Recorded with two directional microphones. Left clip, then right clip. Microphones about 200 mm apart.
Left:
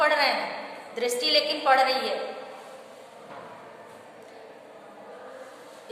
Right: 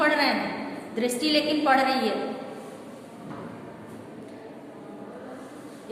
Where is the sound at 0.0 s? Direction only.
10° left (ahead or behind).